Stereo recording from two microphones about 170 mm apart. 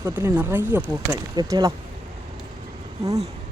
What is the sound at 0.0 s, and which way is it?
Speech, 15° right (ahead or behind).